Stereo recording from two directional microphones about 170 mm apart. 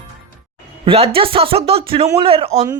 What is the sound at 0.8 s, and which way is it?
Speech, 30° right (ahead or behind).